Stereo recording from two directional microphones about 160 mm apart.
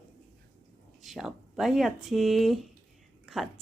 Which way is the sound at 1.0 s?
Centre (ahead or behind).